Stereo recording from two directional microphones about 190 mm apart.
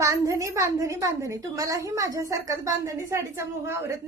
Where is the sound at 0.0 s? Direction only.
15° right (ahead or behind).